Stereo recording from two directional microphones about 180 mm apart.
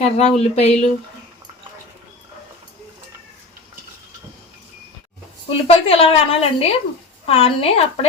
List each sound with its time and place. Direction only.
0.0 s a woman's voice: 35° left (ahead or behind)
5.5 s a woman's voice: 30° left (ahead or behind)